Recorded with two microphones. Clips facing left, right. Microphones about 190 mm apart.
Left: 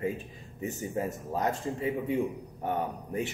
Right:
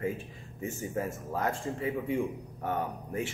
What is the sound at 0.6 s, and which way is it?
Speech, 20° left (ahead or behind).